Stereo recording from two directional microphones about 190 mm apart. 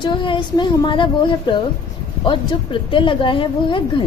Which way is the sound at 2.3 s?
25° left (ahead or behind).